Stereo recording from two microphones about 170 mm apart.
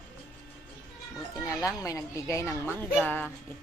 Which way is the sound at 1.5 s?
20° left (ahead or behind).